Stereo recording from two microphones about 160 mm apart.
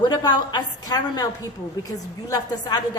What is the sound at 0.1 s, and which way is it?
A woman's voice, 25° left (ahead or behind).